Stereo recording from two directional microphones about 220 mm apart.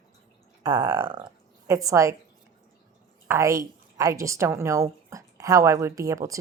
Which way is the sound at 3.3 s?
15° right (ahead or behind).